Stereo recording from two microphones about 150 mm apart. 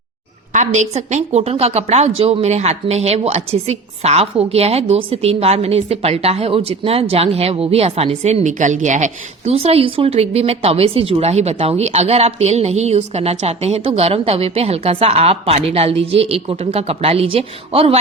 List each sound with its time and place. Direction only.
0.5 s a woman's voice: 55° right (ahead or behind)